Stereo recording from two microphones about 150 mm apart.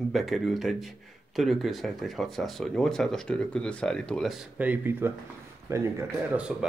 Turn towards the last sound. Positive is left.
turn(degrees=-5)  # may be behind; listen again after turning